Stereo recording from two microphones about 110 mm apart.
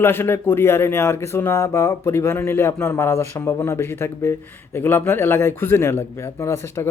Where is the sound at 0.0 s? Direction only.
20° left (ahead or behind).